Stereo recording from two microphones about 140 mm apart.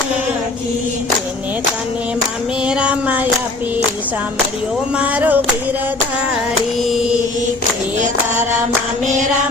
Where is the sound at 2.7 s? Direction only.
5° right (ahead or behind).